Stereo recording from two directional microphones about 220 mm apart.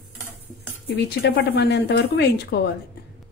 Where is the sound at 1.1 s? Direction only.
50° left (ahead or behind).